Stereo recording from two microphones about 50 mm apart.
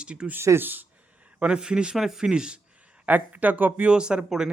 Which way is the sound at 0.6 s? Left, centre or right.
Right.